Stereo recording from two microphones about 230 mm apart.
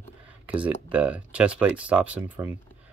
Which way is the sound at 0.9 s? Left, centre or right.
Centre.